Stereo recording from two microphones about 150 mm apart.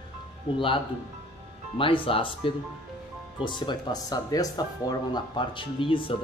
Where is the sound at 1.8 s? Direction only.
35° left (ahead or behind).